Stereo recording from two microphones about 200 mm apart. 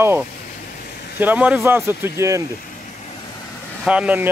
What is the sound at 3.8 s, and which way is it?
Speech, 5° right (ahead or behind).